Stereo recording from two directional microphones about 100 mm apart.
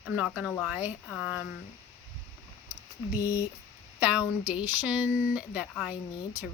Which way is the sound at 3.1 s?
35° left (ahead or behind).